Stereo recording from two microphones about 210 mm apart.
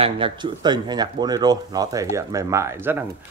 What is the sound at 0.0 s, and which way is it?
Speech, 25° right (ahead or behind).